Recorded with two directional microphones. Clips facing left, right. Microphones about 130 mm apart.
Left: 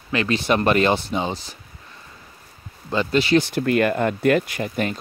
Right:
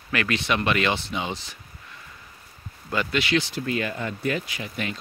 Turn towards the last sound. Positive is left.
turn(degrees=45)  # may be behind; listen again after turning